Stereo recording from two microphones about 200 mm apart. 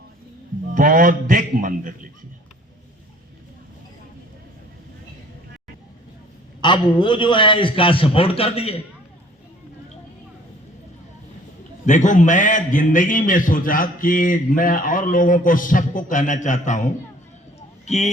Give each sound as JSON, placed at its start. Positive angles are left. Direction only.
{"t": 0.7, "sound": "a man's voice", "side_deg": -45}
{"t": 6.6, "sound": "a man's voice", "side_deg": 25}
{"t": 11.9, "sound": "a man's voice", "side_deg": 40}